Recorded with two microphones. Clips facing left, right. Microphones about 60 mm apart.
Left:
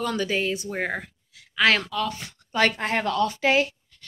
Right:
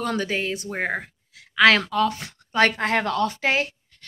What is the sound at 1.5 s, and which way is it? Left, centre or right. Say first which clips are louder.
Speech: right 4 dB; right.